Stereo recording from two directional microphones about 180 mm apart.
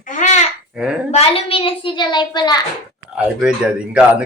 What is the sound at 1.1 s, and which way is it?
A woman's voice, 30° left (ahead or behind).